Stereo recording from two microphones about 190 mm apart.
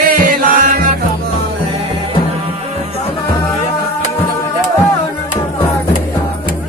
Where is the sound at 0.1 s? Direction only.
45° right (ahead or behind).